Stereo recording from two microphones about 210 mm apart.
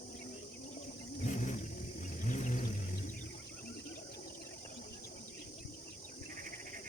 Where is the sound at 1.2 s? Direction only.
35° left (ahead or behind).